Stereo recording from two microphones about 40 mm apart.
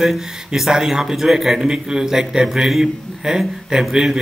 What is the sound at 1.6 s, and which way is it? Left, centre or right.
A man's voice, centre.